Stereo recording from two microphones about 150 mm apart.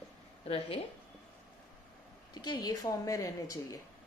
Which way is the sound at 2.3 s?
25° left (ahead or behind).